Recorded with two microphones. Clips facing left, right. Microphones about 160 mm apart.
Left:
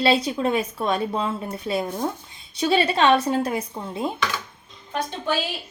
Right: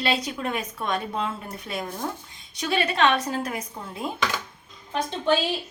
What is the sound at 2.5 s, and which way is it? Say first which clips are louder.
A woman's voice: left 5 dB; 30° left (ahead or behind).